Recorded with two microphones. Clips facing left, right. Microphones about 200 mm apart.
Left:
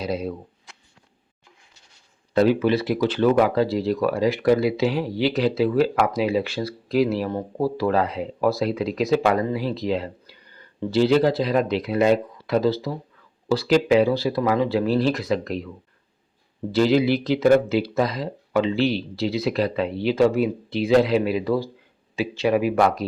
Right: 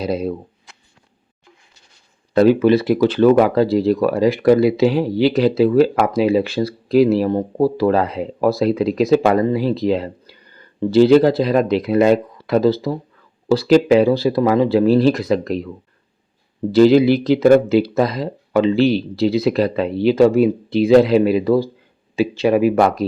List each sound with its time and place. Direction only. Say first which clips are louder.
0.0 s speech: right 5 dB; 35° right (ahead or behind)
2.3 s speech: right 6 dB; 50° right (ahead or behind)
16.7 s speech: right 7 dB; 40° right (ahead or behind)